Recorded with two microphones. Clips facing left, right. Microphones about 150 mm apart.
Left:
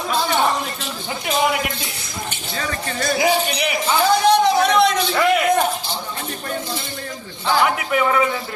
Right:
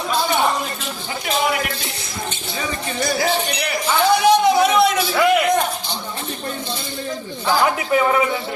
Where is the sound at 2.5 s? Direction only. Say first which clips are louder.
Even; 15° right (ahead or behind).